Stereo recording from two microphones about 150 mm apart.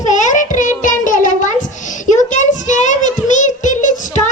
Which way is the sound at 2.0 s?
55° left (ahead or behind).